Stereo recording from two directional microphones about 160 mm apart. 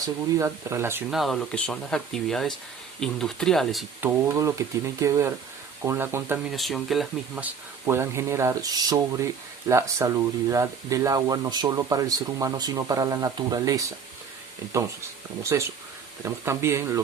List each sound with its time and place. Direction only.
0.0 s speech: 20° right (ahead or behind)
1.1 s speech: centre (ahead or behind)
4.3 s speech: 20° right (ahead or behind)
6.5 s speech: centre (ahead or behind); by 13.8 s 25° right (ahead or behind)
15.5 s speech: 20° right (ahead or behind)